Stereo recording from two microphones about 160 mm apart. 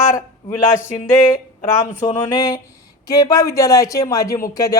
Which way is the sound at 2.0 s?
20° left (ahead or behind).